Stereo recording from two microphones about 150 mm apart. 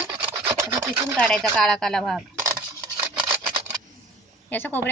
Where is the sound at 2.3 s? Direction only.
20° right (ahead or behind).